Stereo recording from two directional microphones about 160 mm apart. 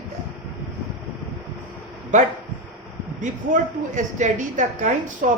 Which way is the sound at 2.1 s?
50° right (ahead or behind).